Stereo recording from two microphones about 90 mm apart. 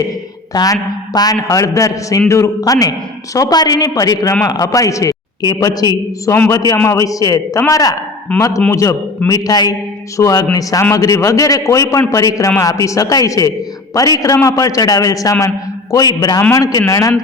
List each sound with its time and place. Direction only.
0.5 s a man's voice: 45° left (ahead or behind)